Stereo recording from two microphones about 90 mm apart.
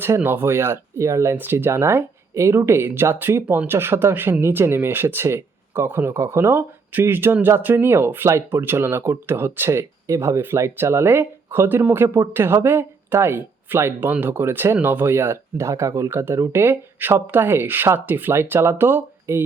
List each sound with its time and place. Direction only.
0.0 s speech: 25° right (ahead or behind)